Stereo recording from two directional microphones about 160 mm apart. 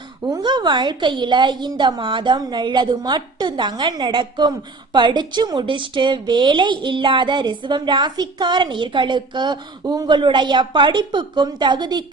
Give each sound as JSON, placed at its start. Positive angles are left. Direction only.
{"t": 0.3, "sound": "a woman's voice", "side_deg": -25}